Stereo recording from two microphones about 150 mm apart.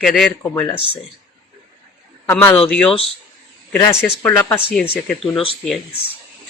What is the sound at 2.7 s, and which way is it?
Speech, 5° left (ahead or behind).